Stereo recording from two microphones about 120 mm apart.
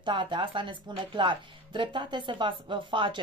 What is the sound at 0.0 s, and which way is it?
Speech, 40° right (ahead or behind).